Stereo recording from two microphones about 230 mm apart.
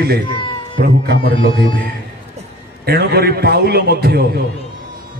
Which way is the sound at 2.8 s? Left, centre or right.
Right.